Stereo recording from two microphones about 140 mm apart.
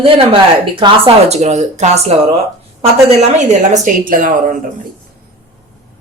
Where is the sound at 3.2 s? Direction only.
55° right (ahead or behind).